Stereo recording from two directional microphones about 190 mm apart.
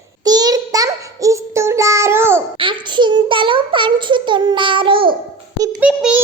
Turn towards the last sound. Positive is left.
turn(degrees=-5)  # may be behind; listen again after turning